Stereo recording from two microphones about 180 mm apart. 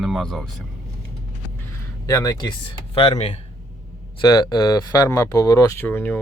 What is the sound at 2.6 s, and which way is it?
Speech, 30° left (ahead or behind).